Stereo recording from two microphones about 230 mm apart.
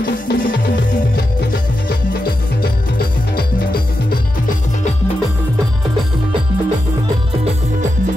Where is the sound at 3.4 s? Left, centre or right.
Left.